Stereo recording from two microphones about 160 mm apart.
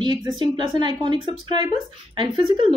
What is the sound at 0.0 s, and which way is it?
A woman's voice, 25° right (ahead or behind).